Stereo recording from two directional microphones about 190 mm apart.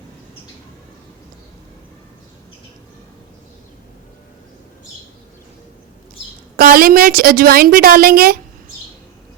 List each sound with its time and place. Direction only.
6.6 s a woman's voice: 50° right (ahead or behind)